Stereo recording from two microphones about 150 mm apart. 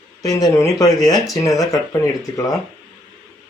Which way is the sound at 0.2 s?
25° left (ahead or behind).